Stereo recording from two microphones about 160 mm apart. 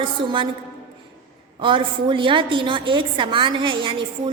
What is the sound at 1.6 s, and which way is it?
A woman's voice, 30° right (ahead or behind).